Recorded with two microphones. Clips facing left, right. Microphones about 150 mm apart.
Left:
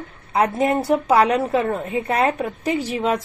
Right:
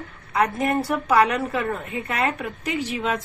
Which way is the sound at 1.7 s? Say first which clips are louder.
Left 5 dB; 35° left (ahead or behind).